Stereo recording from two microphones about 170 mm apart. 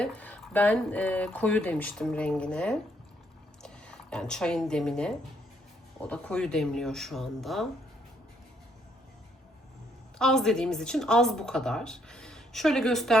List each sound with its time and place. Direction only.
0.0 s speech: 10° left (ahead or behind)
10.2 s speech: 5° left (ahead or behind)